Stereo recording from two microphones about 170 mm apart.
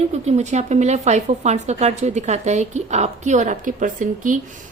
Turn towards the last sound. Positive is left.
turn(degrees=-50)  # may be behind; listen again after turning